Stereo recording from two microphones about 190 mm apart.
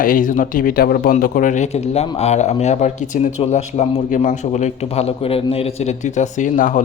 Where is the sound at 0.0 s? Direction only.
45° left (ahead or behind).